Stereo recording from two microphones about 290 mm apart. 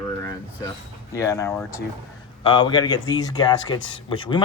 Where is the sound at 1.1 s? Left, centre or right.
Centre.